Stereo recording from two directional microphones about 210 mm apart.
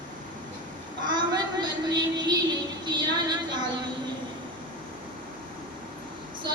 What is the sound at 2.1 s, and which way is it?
A woman's voice, 20° right (ahead or behind).